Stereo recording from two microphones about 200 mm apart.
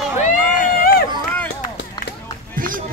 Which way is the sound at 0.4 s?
5° right (ahead or behind).